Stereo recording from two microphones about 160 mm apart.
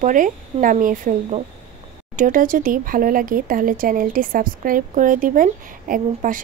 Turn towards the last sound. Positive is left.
turn(degrees=-55)  # may be behind; listen again after turning